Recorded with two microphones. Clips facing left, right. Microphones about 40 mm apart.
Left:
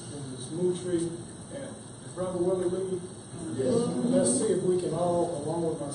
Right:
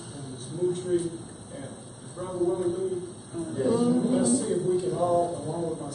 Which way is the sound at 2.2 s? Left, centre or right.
Centre.